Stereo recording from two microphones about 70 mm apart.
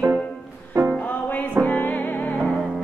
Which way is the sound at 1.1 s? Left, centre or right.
Left.